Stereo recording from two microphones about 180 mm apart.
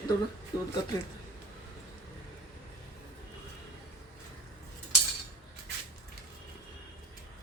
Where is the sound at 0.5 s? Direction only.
20° left (ahead or behind).